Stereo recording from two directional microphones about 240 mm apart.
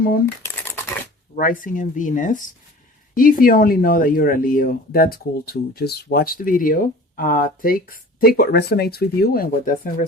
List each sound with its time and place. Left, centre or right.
1.4 s speech: left